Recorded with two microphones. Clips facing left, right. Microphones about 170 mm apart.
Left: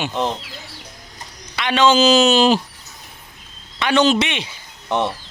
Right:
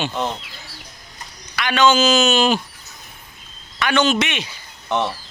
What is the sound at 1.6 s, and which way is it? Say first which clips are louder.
Speech: left 1 dB; 25° left (ahead or behind).